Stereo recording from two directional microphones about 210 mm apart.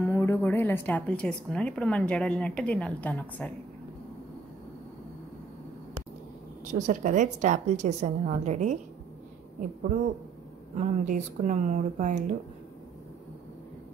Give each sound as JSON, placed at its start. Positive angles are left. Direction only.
{"t": 0.0, "sound": "speech", "side_deg": 10}
{"t": 6.7, "sound": "a woman's voice", "side_deg": -35}
{"t": 10.8, "sound": "a woman's voice", "side_deg": -35}